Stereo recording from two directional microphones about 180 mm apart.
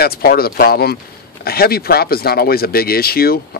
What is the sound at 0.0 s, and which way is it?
Speech, 60° left (ahead or behind).